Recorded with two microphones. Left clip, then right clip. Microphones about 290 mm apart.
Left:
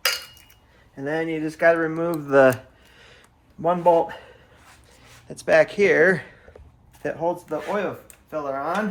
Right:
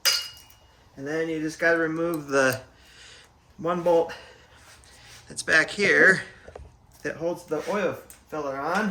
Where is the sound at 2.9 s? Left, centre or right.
Centre.